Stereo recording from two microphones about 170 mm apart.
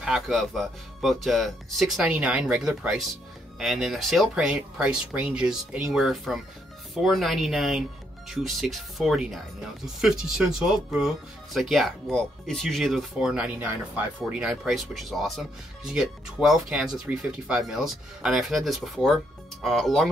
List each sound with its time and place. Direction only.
0.0 s speech: centre (ahead or behind)